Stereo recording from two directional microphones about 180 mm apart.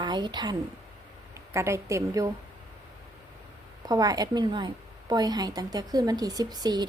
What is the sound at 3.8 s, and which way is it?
A woman's voice, 20° right (ahead or behind).